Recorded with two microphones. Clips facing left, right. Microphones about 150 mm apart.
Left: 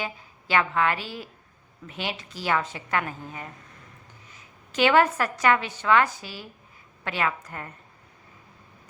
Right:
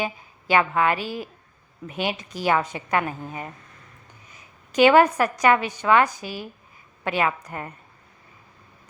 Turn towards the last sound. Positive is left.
turn(degrees=-20)  # may be behind; listen again after turning